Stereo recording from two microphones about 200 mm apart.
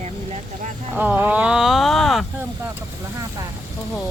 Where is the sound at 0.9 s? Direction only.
10° right (ahead or behind).